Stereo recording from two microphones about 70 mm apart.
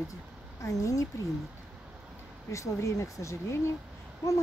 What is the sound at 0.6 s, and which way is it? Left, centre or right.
Speech, left.